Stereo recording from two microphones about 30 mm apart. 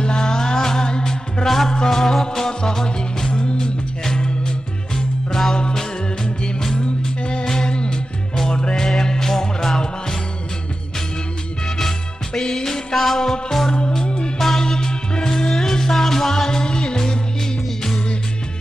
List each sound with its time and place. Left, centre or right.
0.0 s music: left
3.3 s music: left
4.9 s music: centre
6.8 s music: left; by 9.8 s centre
12.4 s music: centre
13.7 s music: left
14.4 s music: centre